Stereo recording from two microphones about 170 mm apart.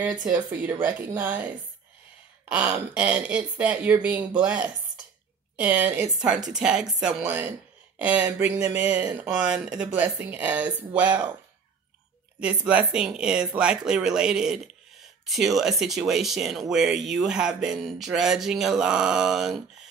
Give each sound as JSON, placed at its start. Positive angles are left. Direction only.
{"t": 0.5, "sound": "speech", "side_deg": -10}
{"t": 2.9, "sound": "speech", "side_deg": -5}
{"t": 12.4, "sound": "speech", "side_deg": -5}